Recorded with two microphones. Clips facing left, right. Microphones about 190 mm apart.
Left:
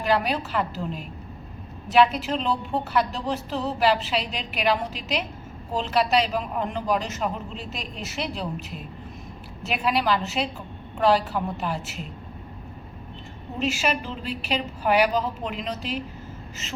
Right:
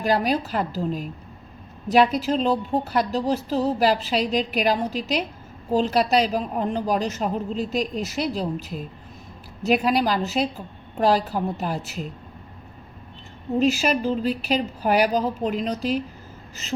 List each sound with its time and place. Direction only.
0.0 s a woman's voice: 40° right (ahead or behind)
13.6 s a woman's voice: 40° right (ahead or behind)